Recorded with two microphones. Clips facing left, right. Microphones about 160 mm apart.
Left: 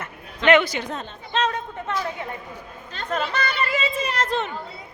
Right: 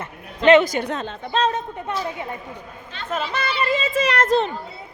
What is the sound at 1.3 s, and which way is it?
Speech, 30° right (ahead or behind).